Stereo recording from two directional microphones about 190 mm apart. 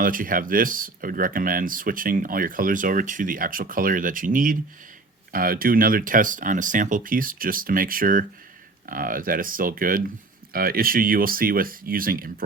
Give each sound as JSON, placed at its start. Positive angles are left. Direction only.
{"t": 0.0, "sound": "speech", "side_deg": -45}